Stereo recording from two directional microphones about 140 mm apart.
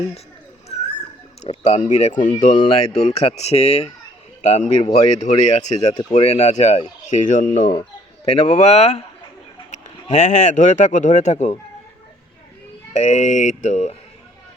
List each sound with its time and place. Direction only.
1.4 s a sound: 55° left (ahead or behind)
1.9 s speech: 55° left (ahead or behind)
7.7 s speech: 45° left (ahead or behind)
12.9 s speech: 55° left (ahead or behind)